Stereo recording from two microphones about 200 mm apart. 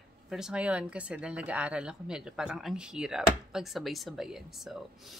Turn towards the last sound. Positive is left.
turn(degrees=0)  # may be behind; listen again after turning